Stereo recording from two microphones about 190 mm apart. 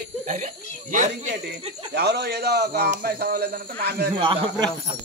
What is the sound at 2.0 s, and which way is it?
Speech, 60° right (ahead or behind).